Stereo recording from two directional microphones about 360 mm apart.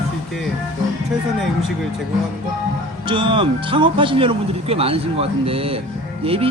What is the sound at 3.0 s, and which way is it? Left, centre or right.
Speech, centre.